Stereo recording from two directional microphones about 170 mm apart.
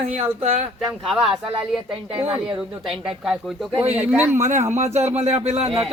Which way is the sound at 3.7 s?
35° right (ahead or behind).